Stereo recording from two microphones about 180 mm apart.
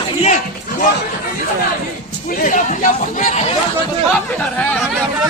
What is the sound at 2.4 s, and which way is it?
Speech, 45° left (ahead or behind).